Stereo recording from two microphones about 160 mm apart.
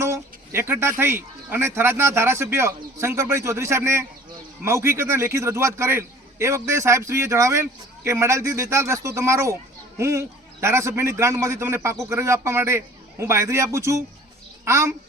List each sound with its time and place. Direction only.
0.0 s a man's voice: 15° right (ahead or behind)